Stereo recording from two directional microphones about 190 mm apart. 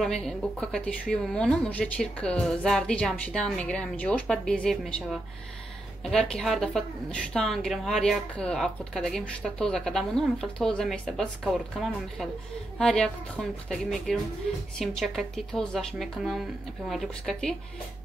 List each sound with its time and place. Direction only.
0.0 s speech: centre (ahead or behind)